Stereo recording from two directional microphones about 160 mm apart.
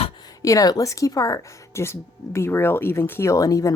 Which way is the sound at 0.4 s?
20° left (ahead or behind).